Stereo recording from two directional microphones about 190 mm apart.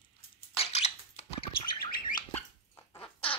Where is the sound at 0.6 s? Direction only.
35° left (ahead or behind).